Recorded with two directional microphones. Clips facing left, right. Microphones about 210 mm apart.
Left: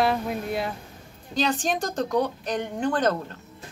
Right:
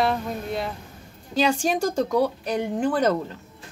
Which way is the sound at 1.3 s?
10° right (ahead or behind).